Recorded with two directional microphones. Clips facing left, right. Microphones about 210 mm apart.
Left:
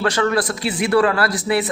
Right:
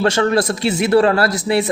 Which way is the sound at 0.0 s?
25° right (ahead or behind).